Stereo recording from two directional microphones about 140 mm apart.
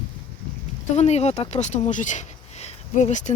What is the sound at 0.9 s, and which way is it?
Speech, 50° left (ahead or behind).